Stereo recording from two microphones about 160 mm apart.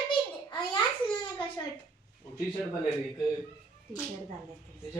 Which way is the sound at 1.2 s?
30° left (ahead or behind).